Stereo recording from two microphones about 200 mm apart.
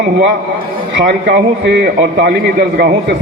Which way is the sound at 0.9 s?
55° right (ahead or behind).